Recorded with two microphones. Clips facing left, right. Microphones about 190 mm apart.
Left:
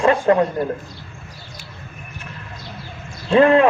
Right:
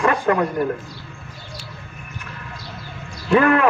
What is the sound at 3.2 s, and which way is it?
Speech, 25° left (ahead or behind).